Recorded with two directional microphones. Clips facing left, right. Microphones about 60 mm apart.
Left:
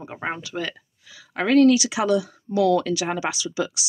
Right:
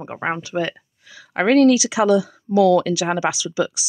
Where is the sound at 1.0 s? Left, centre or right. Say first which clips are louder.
Right 6 dB; right.